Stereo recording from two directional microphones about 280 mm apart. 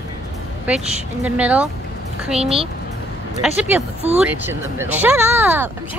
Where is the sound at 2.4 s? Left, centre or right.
Right.